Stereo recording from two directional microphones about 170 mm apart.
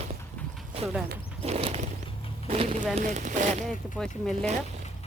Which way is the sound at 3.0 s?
45° right (ahead or behind).